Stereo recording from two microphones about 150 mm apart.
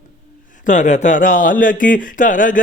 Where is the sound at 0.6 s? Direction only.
55° left (ahead or behind).